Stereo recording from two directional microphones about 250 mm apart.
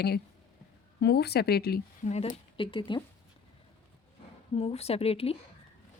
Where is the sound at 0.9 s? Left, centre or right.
Left.